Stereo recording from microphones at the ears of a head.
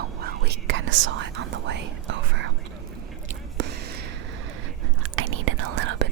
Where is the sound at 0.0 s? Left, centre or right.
Right.